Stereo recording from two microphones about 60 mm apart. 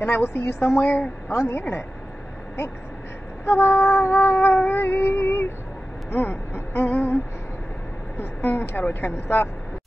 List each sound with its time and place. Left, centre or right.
0.0 s a woman's voice: left
1.6 s a woman's voice: left
3.4 s a woman's voice: left
4.6 s a woman's voice: left
8.2 s a woman's voice: left